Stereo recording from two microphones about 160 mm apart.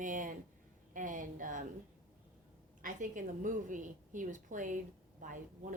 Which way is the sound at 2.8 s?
55° right (ahead or behind).